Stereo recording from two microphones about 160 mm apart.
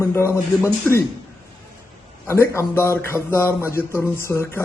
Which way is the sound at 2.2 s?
15° left (ahead or behind).